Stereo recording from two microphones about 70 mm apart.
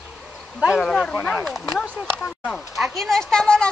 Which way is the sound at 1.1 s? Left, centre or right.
Centre.